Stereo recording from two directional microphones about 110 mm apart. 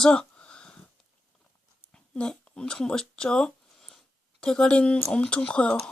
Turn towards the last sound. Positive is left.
turn(degrees=10)  # may be behind; listen again after turning